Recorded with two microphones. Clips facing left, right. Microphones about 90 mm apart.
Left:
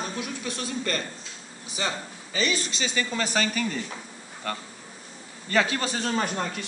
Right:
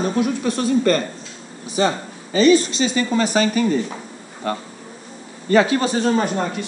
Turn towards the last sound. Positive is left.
turn(degrees=-20)  # may be behind; listen again after turning